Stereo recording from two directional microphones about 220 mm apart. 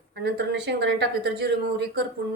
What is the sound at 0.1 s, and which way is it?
Speech, 50° right (ahead or behind).